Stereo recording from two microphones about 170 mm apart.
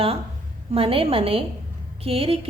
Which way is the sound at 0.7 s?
35° right (ahead or behind).